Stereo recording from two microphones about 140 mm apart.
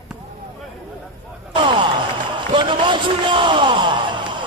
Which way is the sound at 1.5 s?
35° right (ahead or behind).